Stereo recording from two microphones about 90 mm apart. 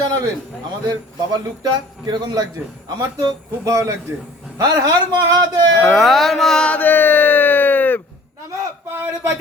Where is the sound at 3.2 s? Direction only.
40° right (ahead or behind).